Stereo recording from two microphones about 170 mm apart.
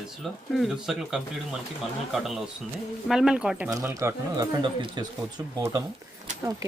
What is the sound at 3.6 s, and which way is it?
Speech, 15° right (ahead or behind).